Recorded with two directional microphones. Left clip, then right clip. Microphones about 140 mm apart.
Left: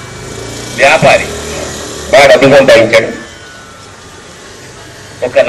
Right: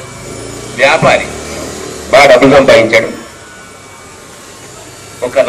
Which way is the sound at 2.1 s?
40° right (ahead or behind).